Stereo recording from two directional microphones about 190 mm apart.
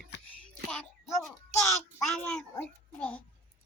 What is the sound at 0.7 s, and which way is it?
Music, 5° left (ahead or behind).